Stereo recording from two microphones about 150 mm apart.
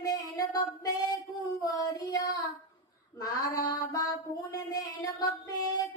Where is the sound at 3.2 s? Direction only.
25° left (ahead or behind).